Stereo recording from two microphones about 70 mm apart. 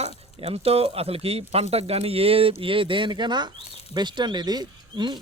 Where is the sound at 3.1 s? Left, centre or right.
Right.